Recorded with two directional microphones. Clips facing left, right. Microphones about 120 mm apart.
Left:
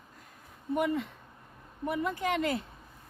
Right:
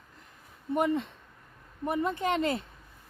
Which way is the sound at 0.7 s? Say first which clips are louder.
Right 2 dB; 30° right (ahead or behind).